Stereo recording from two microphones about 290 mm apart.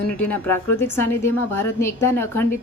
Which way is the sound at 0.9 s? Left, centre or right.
Left.